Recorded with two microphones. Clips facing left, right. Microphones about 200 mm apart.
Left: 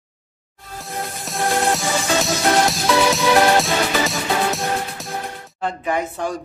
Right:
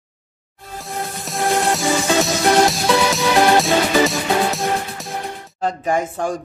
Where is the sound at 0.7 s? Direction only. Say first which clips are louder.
Right 2 dB; centre (ahead or behind).